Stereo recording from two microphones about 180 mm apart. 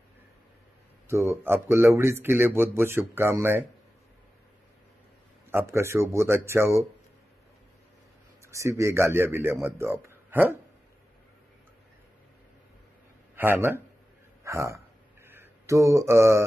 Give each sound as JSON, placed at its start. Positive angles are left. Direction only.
{"t": 1.0, "sound": "speech", "side_deg": -15}
{"t": 5.5, "sound": "speech", "side_deg": -15}
{"t": 8.5, "sound": "speech", "side_deg": -15}
{"t": 13.4, "sound": "speech", "side_deg": -15}